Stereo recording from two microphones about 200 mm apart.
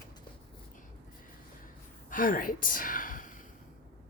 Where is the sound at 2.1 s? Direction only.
45° left (ahead or behind).